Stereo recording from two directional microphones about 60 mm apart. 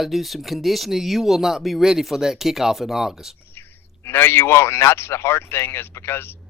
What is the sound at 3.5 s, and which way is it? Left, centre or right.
A man's voice, left.